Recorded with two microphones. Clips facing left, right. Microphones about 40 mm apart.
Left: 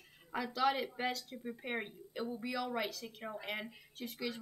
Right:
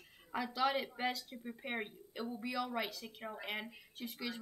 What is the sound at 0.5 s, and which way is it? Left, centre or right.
Speech, centre.